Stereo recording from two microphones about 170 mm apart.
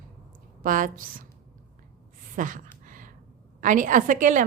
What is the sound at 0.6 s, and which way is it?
Speech, 50° right (ahead or behind).